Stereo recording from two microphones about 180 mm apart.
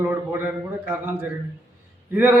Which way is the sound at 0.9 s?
10° right (ahead or behind).